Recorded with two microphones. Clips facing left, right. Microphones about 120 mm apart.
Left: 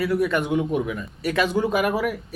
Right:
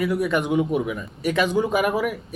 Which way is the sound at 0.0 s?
15° right (ahead or behind).